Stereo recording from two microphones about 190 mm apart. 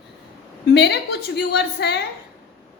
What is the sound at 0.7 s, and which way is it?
A woman's voice, 60° left (ahead or behind).